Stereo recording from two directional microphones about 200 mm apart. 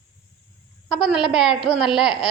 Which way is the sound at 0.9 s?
5° right (ahead or behind).